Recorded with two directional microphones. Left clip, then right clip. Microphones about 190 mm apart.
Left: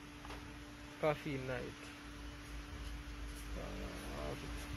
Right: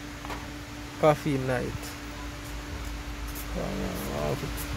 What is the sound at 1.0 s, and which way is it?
Speech, 15° right (ahead or behind).